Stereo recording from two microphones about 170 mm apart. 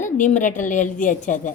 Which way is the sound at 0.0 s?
50° left (ahead or behind).